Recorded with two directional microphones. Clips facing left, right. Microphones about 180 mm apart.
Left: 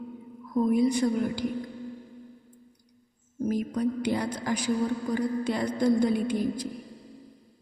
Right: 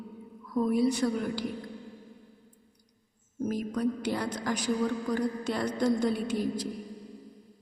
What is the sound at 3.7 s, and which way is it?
A man's voice, 10° left (ahead or behind).